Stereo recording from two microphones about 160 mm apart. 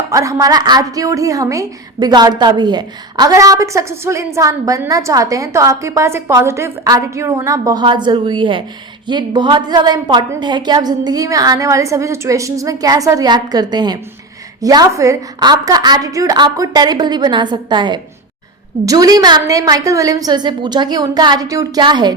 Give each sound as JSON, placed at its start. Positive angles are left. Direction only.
{"t": 0.1, "sound": "a woman's voice", "side_deg": -20}